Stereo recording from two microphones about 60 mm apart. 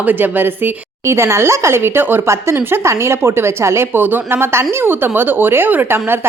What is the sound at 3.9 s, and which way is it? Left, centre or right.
A woman's voice, right.